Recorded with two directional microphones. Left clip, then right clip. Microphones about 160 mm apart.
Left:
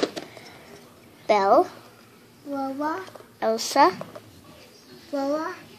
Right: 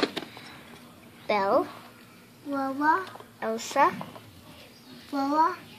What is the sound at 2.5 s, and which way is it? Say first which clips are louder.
Speech: right 3 dB; 20° right (ahead or behind).